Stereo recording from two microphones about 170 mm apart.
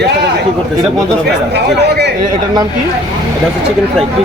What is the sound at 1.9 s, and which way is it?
Speech, 75° right (ahead or behind).